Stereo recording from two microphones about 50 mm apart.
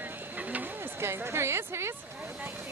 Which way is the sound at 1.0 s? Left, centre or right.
Right.